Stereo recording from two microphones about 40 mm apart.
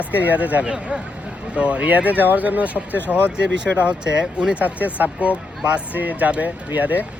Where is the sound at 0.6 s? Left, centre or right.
Centre.